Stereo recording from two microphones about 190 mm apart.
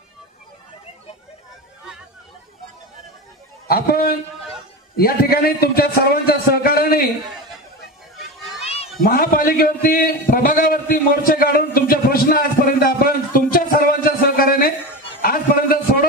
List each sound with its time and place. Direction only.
3.6 s a man's voice: 55° left (ahead or behind)
8.6 s children playing: 30° left (ahead or behind)
9.0 s a man's voice: 50° left (ahead or behind)
15.2 s a sound: 50° left (ahead or behind)